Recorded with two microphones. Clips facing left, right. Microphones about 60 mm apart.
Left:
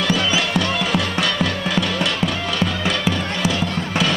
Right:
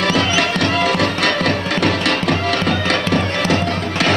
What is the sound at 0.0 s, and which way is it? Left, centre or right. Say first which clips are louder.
Music: right 3 dB; right.